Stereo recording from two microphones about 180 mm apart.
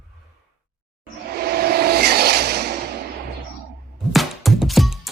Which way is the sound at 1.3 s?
60° right (ahead or behind).